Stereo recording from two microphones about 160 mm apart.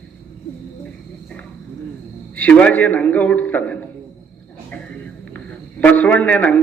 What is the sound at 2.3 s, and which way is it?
A man's voice, 10° left (ahead or behind).